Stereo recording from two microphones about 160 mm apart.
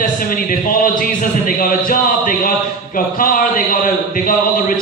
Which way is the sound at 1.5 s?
60° left (ahead or behind).